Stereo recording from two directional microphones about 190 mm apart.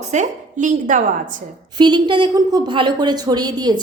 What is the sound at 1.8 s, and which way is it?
A woman's voice, 25° right (ahead or behind).